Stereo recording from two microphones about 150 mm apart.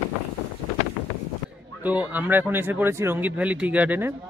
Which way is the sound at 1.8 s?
10° right (ahead or behind).